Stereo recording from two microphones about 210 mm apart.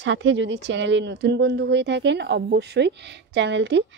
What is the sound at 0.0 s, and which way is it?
Speech, 60° right (ahead or behind).